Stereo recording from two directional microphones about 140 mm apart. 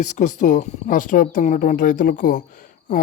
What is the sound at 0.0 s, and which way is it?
Speech, 60° left (ahead or behind).